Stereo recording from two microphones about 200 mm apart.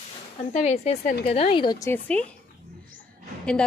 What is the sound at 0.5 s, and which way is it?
Speech, 35° left (ahead or behind).